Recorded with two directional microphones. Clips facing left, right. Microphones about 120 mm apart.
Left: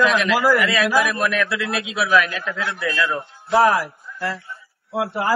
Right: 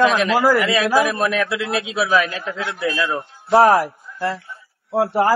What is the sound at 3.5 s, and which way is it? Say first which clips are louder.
A man's voice: right 3 dB; 35° right (ahead or behind).